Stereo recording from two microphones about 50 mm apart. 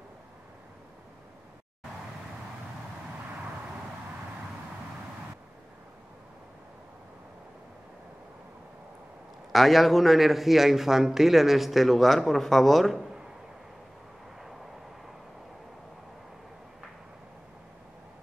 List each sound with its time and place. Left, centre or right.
9.5 s a man's voice: centre